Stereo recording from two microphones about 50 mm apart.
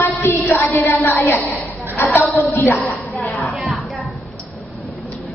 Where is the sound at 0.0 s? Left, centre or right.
Left.